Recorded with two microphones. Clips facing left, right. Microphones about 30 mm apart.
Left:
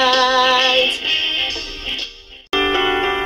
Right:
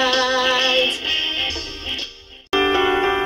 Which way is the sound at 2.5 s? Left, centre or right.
Centre.